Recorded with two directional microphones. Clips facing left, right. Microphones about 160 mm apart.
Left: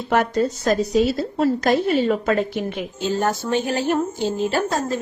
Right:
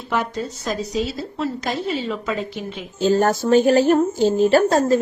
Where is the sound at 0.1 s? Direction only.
55° left (ahead or behind).